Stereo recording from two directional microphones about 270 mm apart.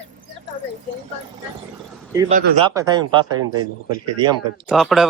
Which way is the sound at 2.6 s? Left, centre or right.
Centre.